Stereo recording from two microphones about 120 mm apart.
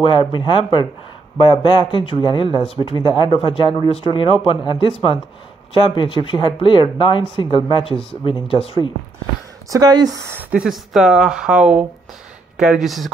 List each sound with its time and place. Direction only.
0.0 s speech: 45° left (ahead or behind)
9.7 s speech: 30° right (ahead or behind)
10.3 s speech: 10° right (ahead or behind)